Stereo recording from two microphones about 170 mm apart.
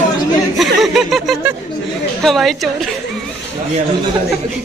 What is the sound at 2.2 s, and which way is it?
Speech, centre (ahead or behind).